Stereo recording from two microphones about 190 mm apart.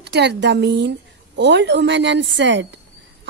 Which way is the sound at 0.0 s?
60° right (ahead or behind).